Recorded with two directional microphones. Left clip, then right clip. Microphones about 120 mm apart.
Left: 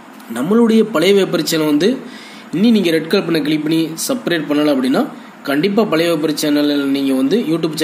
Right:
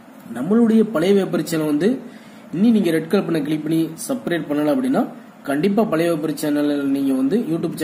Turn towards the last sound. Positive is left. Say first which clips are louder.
# left 5 dB
turn(degrees=15)  # may be behind; listen again after turning